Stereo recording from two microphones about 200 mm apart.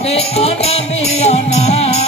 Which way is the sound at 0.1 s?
30° left (ahead or behind).